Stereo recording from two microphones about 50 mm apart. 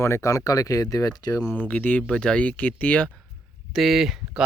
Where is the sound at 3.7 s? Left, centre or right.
Centre.